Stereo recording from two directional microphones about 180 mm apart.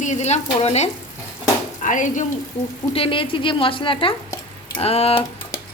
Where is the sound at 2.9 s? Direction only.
30° left (ahead or behind).